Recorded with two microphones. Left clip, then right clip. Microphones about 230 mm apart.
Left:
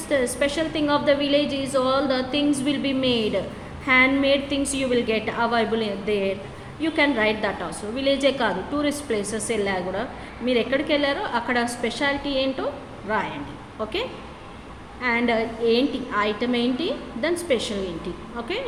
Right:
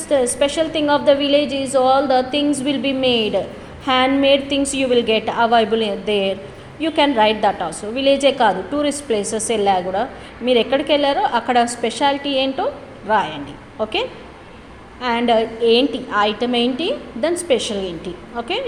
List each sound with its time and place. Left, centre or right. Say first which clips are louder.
0.1 s a woman's voice: right 6 dB; centre
15.0 s a woman's voice: right 6 dB; right